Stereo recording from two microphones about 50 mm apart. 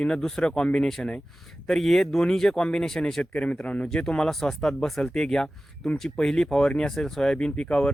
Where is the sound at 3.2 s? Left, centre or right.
Left.